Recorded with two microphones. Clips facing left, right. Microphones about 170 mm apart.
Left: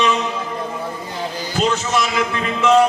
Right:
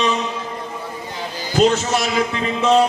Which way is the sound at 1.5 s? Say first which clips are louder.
Right 3 dB; 40° right (ahead or behind).